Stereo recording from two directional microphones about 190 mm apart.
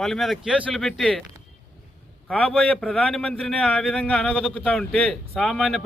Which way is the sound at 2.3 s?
5° left (ahead or behind).